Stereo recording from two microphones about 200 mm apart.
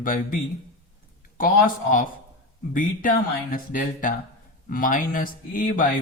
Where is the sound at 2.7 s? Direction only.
40° left (ahead or behind).